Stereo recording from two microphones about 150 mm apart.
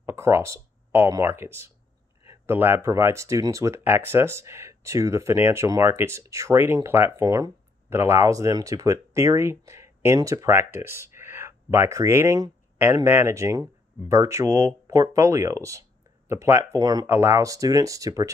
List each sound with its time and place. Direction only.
0.0 s speech: 20° right (ahead or behind)
17.1 s speech: 15° right (ahead or behind)